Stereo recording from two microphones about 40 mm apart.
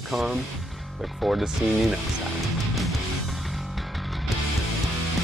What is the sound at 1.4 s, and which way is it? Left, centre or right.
Speech, centre.